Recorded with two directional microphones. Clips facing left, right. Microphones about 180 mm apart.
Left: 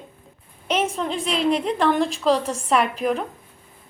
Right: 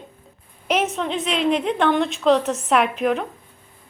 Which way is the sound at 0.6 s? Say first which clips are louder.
Right 1 dB; 30° left (ahead or behind).